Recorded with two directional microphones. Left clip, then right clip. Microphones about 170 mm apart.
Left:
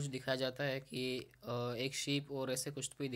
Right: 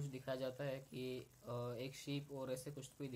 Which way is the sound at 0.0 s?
20° left (ahead or behind).